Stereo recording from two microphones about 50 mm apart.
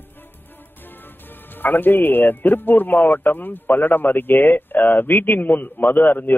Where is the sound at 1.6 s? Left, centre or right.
Left.